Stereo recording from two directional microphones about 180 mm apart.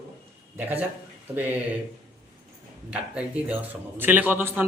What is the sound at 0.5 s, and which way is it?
Speech, 10° right (ahead or behind).